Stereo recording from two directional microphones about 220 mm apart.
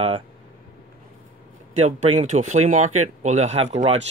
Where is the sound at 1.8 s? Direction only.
30° right (ahead or behind).